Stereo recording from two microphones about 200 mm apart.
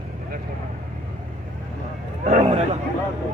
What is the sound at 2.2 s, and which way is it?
Speech, 30° right (ahead or behind).